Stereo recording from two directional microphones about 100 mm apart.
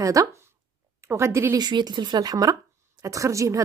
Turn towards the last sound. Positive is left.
turn(degrees=-30)  # may be behind; listen again after turning